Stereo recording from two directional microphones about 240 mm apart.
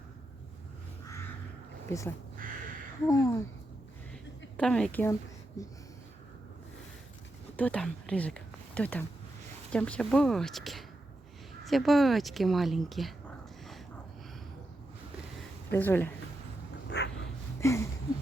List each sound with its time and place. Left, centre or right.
1.9 s speech: centre
4.5 s speech: centre
7.5 s speech: centre
15.7 s speech: centre
16.9 s dog: left
17.6 s a sound: centre